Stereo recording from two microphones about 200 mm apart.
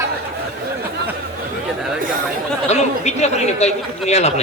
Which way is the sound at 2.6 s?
35° left (ahead or behind).